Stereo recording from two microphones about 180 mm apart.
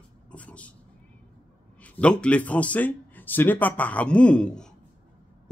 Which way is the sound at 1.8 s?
5° left (ahead or behind).